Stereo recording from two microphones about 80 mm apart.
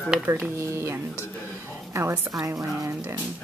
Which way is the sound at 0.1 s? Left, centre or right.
Centre.